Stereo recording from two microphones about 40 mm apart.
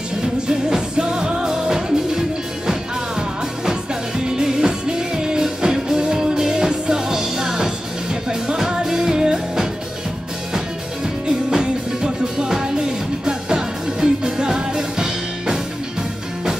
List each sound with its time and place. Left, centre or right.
0.5 s music: centre
11.2 s music: centre